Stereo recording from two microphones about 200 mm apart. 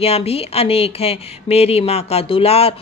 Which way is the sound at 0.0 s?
30° left (ahead or behind).